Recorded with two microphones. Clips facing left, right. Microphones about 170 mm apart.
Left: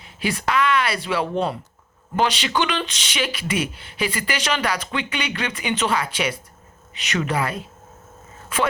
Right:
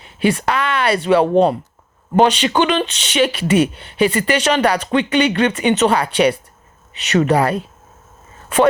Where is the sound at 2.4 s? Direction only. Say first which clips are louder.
Right 7 dB; 30° right (ahead or behind).